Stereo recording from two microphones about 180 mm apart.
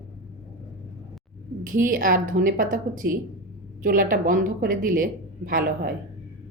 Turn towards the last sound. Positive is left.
turn(degrees=-50)  # may be behind; listen again after turning